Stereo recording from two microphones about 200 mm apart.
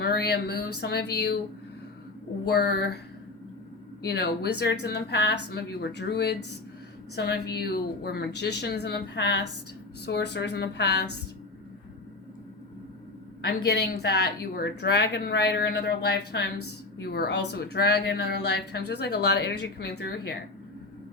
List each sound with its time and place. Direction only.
0.0 s speech: 55° left (ahead or behind)
2.6 s speech: 55° left (ahead or behind)
4.0 s speech: 55° left (ahead or behind)
7.5 s speech: 50° left (ahead or behind)
13.4 s speech: 55° left (ahead or behind)